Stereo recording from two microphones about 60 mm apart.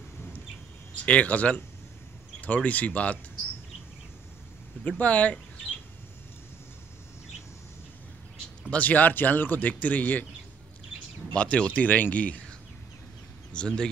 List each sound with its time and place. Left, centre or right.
1.0 s speech: left
4.8 s speech: left
8.6 s speech: left
11.3 s speech: centre